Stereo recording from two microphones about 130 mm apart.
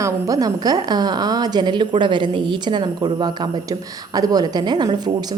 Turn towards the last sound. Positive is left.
turn(degrees=-30)  # may be behind; listen again after turning